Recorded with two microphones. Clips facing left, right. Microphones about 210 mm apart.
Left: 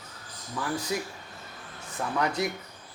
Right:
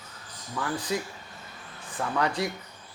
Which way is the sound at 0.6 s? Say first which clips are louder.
Even; 25° left (ahead or behind).